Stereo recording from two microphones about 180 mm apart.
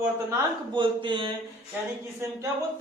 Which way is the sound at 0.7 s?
25° right (ahead or behind).